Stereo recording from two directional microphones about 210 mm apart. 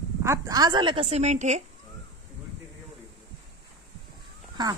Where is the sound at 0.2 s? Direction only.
15° right (ahead or behind); by 1.6 s 35° right (ahead or behind).